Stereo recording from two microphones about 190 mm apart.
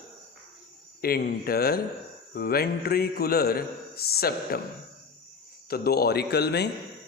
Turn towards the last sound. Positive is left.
turn(degrees=60)  # may be behind; listen again after turning